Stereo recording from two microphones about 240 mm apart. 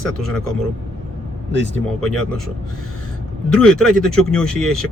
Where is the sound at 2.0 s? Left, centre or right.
Centre.